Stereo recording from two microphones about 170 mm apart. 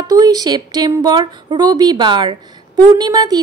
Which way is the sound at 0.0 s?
25° right (ahead or behind).